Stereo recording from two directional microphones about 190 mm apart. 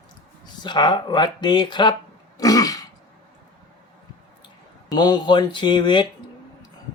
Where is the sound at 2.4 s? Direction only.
20° left (ahead or behind).